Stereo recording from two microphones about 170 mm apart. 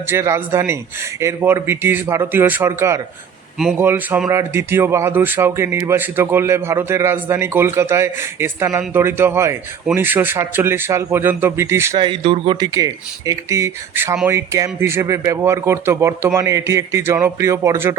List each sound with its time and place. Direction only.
0.1 s speech: 15° right (ahead or behind)
12.0 s speech: 30° right (ahead or behind)